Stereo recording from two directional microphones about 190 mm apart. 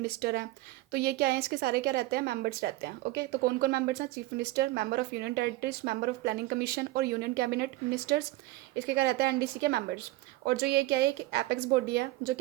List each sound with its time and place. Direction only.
0.0 s speech: 55° right (ahead or behind)